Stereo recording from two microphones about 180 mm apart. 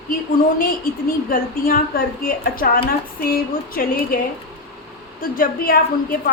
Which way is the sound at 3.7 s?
55° left (ahead or behind).